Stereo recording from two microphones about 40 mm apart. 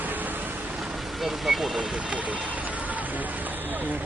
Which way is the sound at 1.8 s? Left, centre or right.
Right.